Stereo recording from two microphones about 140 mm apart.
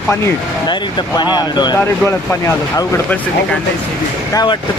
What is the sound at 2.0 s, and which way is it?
Speech, 20° left (ahead or behind).